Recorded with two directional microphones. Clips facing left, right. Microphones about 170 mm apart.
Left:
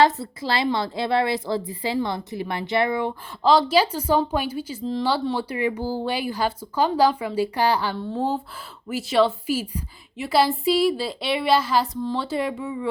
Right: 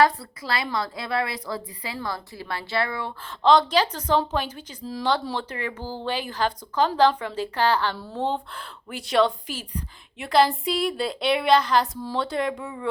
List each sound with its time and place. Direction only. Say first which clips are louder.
0.0 s a woman's voice: left 2 dB; 25° left (ahead or behind)
3.4 s a woman's voice: left 1 dB; 5° left (ahead or behind)